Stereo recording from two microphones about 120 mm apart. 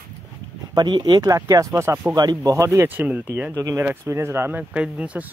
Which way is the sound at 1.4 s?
25° right (ahead or behind).